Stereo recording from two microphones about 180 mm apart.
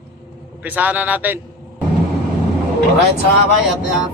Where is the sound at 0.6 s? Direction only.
10° right (ahead or behind).